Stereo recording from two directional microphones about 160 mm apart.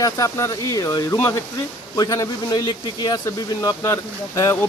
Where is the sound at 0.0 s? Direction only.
20° left (ahead or behind).